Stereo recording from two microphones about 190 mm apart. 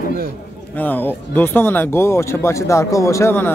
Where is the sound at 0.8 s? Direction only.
10° left (ahead or behind).